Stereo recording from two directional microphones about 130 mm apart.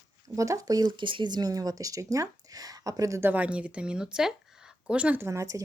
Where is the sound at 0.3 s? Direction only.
25° right (ahead or behind).